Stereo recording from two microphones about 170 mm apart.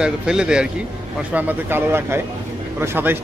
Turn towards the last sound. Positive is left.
turn(degrees=-15)  # may be behind; listen again after turning